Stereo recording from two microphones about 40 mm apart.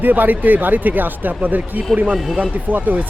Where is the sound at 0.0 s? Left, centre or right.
Right.